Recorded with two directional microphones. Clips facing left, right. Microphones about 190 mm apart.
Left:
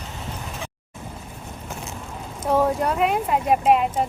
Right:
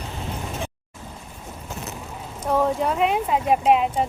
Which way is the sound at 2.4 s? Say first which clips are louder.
Left 1 dB; 5° left (ahead or behind).